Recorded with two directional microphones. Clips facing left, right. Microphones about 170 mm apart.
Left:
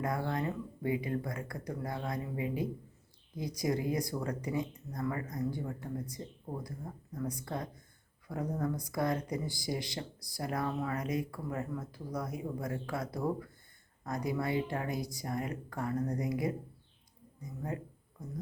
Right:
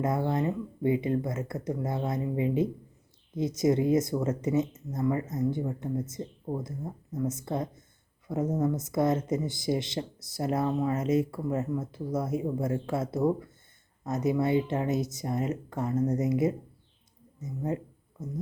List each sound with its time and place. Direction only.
0.0 s speech: 25° right (ahead or behind)